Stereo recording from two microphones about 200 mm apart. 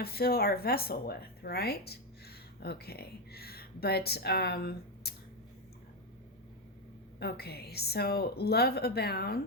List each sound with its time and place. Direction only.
0.0 s speech: 50° left (ahead or behind)
7.2 s speech: 50° left (ahead or behind)